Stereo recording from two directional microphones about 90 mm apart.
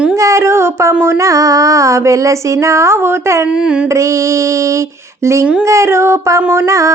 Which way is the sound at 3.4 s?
10° right (ahead or behind).